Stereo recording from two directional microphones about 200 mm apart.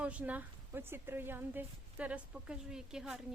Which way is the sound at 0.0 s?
5° right (ahead or behind).